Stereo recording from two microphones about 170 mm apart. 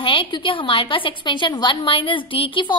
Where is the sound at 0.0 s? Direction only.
30° left (ahead or behind).